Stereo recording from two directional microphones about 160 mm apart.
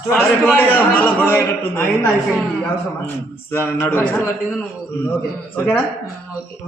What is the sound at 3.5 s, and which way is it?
Speech, 15° left (ahead or behind).